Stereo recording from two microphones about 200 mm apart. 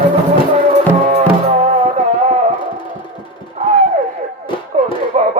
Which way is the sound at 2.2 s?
35° right (ahead or behind).